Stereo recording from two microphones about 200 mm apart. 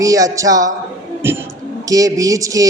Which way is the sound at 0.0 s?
15° right (ahead or behind).